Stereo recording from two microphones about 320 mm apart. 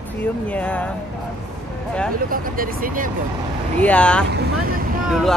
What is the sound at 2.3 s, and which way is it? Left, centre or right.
Speech, right.